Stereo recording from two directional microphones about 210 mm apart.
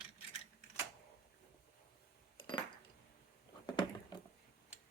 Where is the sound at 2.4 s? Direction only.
25° left (ahead or behind).